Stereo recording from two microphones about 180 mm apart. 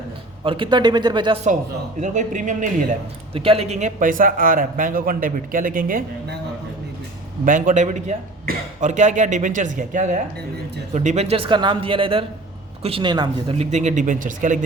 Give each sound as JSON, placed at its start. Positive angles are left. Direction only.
{"t": 0.4, "sound": "speech", "side_deg": -30}
{"t": 2.0, "sound": "a man's voice", "side_deg": -45}
{"t": 3.3, "sound": "a man's voice", "side_deg": -30}
{"t": 7.4, "sound": "a man's voice", "side_deg": -45}